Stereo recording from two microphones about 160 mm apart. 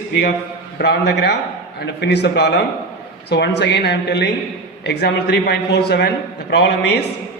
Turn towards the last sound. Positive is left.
turn(degrees=90)